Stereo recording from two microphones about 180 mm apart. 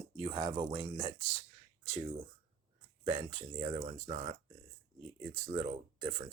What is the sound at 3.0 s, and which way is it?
Speech, 35° right (ahead or behind).